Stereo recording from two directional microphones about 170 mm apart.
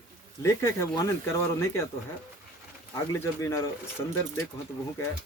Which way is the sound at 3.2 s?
15° left (ahead or behind).